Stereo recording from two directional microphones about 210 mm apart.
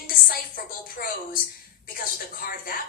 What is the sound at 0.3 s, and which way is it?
A woman's voice, 45° left (ahead or behind).